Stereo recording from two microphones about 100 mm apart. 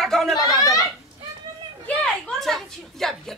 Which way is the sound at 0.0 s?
Centre (ahead or behind).